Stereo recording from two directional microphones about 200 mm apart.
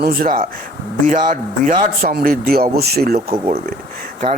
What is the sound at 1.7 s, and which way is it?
Speech, 45° right (ahead or behind).